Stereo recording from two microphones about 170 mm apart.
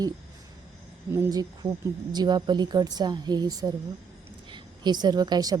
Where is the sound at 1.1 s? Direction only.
20° right (ahead or behind).